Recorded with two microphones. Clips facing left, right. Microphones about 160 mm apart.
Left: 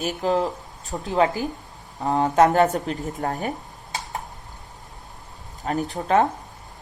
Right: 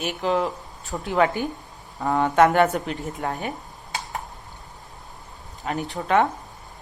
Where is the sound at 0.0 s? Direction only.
40° left (ahead or behind).